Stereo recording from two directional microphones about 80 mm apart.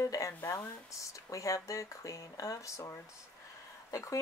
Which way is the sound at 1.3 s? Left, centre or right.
Left.